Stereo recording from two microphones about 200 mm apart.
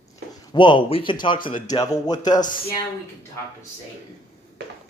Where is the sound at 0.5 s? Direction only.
25° left (ahead or behind).